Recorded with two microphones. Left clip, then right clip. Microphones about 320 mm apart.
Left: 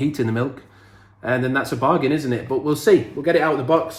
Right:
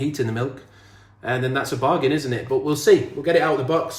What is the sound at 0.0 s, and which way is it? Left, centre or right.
Speech, centre.